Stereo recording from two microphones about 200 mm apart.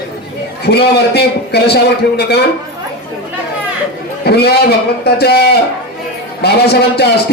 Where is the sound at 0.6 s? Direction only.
55° left (ahead or behind).